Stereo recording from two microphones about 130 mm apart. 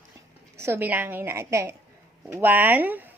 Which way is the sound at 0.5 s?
20° right (ahead or behind).